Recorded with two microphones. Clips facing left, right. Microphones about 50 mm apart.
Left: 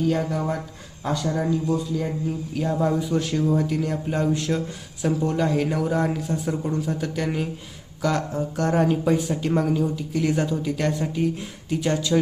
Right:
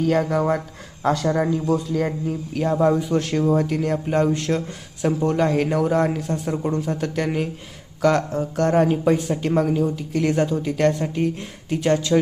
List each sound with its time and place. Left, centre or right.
0.1 s speech: right
2.6 s speech: right
8.4 s speech: right